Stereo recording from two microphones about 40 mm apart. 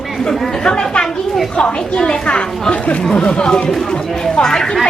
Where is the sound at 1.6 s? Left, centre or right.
Left.